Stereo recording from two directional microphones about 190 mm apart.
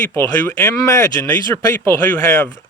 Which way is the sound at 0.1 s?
15° left (ahead or behind).